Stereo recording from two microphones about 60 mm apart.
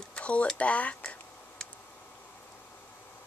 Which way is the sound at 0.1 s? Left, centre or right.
Left.